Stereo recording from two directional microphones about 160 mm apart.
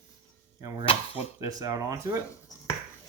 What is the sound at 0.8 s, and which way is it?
Speech, 35° left (ahead or behind).